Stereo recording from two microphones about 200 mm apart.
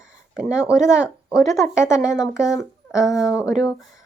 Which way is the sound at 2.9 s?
15° left (ahead or behind).